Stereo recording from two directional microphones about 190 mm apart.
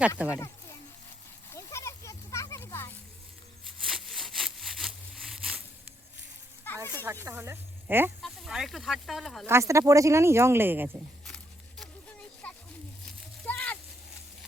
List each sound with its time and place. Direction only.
0.3 s a sound: 15° left (ahead or behind)
3.8 s sawing: centre (ahead or behind)
6.9 s speech: 10° right (ahead or behind)
8.2 s speech: centre (ahead or behind)
9.5 s speech: 15° right (ahead or behind)
12.4 s a sound: 10° left (ahead or behind)